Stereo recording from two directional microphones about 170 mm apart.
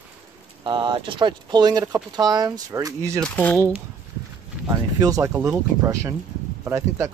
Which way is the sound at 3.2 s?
5° left (ahead or behind).